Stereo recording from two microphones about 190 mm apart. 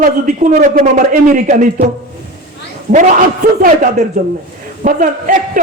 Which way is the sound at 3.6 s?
45° right (ahead or behind).